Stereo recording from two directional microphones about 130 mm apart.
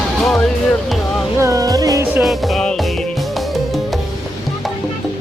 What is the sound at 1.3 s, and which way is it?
Music, 25° right (ahead or behind).